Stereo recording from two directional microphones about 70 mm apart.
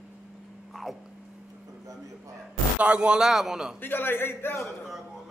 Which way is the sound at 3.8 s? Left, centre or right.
Left.